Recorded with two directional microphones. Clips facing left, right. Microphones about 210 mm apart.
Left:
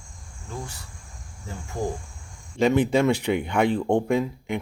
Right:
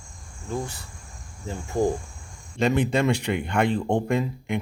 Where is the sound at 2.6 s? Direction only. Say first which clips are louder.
Left 2 dB; 5° left (ahead or behind).